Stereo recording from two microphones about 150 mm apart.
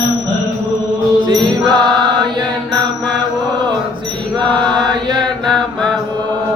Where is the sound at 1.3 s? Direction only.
30° right (ahead or behind).